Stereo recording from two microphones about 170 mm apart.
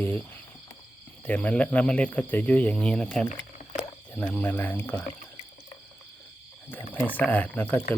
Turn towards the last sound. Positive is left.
turn(degrees=10)  # may be behind; listen again after turning